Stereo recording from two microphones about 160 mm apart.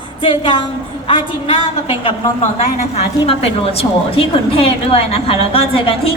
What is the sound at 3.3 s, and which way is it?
A woman's voice, 40° left (ahead or behind).